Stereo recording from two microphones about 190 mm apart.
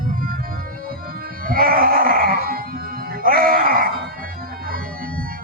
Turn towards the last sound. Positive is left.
turn(degrees=-50)  # may be behind; listen again after turning